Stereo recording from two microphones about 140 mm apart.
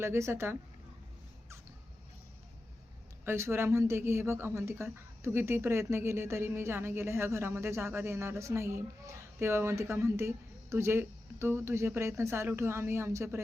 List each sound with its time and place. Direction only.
0.0 s a woman's voice: 20° right (ahead or behind)
3.2 s a woman's voice: 15° right (ahead or behind)